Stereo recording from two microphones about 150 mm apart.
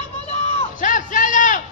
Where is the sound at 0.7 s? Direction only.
60° left (ahead or behind).